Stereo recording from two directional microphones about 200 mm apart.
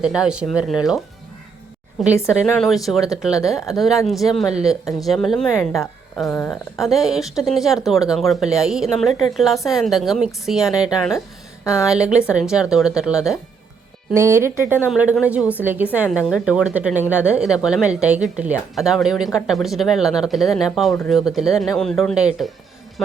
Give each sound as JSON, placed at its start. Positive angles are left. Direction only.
{"t": 0.0, "sound": "speech", "side_deg": -5}
{"t": 6.2, "sound": "speech", "side_deg": 15}
{"t": 6.7, "sound": "speech", "side_deg": 0}
{"t": 11.6, "sound": "a woman's voice", "side_deg": 15}
{"t": 11.9, "sound": "a woman's voice", "side_deg": -5}